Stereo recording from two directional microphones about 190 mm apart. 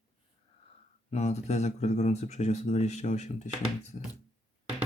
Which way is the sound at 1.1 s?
35° left (ahead or behind).